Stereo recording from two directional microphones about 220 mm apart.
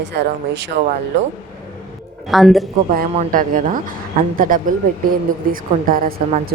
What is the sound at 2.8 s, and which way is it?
A woman's voice, 40° right (ahead or behind).